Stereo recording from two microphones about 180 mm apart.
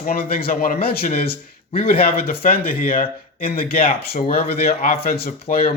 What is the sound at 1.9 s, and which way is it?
Speech, 55° left (ahead or behind).